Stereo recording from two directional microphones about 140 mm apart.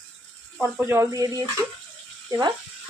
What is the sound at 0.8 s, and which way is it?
Speech, 20° right (ahead or behind).